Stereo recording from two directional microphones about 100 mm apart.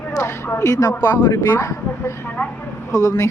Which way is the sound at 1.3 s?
30° left (ahead or behind).